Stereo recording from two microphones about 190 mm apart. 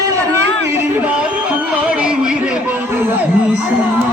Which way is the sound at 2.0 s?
5° right (ahead or behind).